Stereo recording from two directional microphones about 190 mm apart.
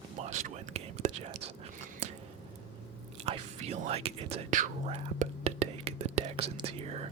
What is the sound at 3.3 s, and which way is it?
Whispering, 30° right (ahead or behind).